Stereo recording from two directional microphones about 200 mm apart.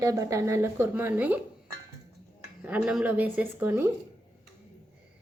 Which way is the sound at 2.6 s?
5° right (ahead or behind).